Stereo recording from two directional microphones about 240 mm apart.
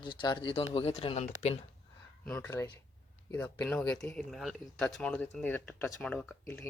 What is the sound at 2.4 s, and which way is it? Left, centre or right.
Speech, centre.